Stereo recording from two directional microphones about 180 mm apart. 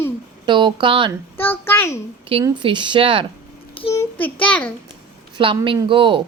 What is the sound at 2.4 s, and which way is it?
Speech, 25° right (ahead or behind).